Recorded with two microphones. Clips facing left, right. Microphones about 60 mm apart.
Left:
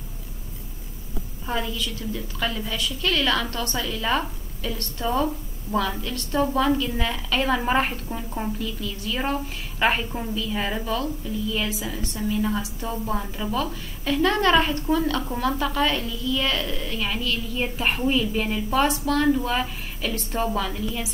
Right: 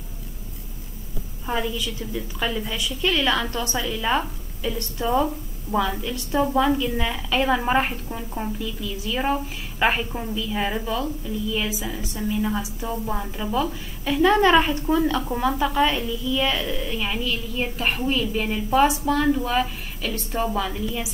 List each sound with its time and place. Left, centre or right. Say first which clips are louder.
1.4 s a woman's voice: right 2 dB; centre